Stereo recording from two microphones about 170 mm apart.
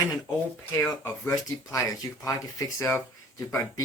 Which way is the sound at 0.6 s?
15° left (ahead or behind).